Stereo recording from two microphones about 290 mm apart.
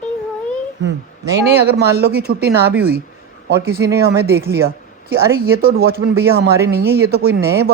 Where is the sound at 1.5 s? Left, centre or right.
Right.